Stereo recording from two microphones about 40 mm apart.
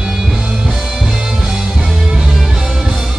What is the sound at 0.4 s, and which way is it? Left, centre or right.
Music, centre.